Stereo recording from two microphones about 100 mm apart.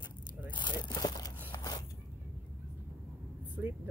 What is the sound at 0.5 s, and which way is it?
Crumpling, 50° left (ahead or behind).